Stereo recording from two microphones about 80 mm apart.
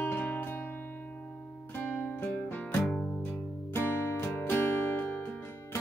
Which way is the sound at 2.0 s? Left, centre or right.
Left.